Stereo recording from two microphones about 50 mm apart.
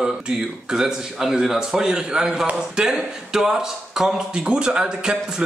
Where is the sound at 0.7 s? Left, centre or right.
Centre.